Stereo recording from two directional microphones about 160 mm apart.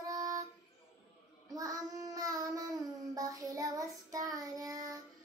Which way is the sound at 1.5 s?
20° right (ahead or behind).